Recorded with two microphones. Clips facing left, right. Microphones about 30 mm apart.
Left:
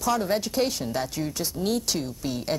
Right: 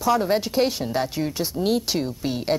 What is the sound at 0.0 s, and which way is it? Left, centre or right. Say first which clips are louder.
Speech: right 4 dB; centre.